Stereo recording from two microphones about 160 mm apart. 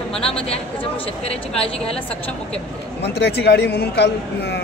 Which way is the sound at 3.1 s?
90° left.